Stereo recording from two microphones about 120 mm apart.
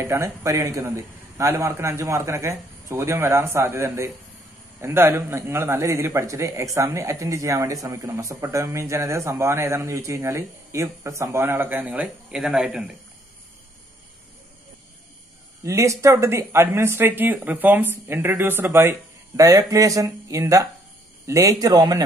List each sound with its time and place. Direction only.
0.0 s speech: 25° right (ahead or behind); by 12.9 s 5° right (ahead or behind)
15.6 s speech: 25° right (ahead or behind)